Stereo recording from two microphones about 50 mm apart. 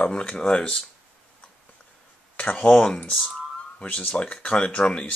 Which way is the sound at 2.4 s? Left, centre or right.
Left.